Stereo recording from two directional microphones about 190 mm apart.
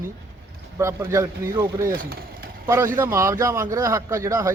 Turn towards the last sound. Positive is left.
turn(degrees=-15)  # may be behind; listen again after turning